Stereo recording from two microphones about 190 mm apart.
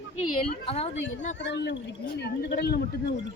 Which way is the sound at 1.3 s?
65° left (ahead or behind).